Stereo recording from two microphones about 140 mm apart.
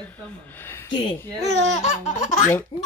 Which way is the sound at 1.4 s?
55° left (ahead or behind).